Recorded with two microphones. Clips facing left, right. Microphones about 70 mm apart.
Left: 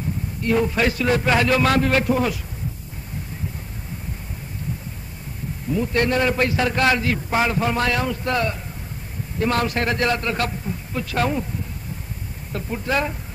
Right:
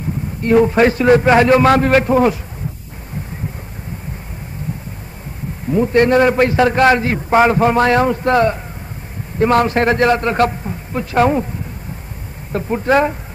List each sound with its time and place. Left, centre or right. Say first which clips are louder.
0.4 s a man's voice: right 9 dB; right
5.7 s a man's voice: right 8 dB; right
12.5 s a man's voice: right 9 dB; right